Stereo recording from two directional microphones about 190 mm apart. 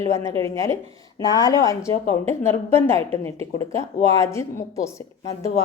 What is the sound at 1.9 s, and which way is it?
A woman's voice, 15° left (ahead or behind).